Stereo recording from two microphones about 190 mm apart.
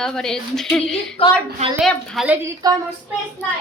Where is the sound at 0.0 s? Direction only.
5° left (ahead or behind).